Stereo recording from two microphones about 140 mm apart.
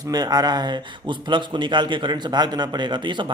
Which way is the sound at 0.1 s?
30° right (ahead or behind).